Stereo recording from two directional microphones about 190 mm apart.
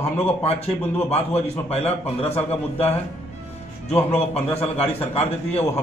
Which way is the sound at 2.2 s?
30° left (ahead or behind).